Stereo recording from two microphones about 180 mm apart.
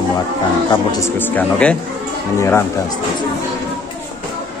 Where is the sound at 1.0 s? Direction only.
10° left (ahead or behind).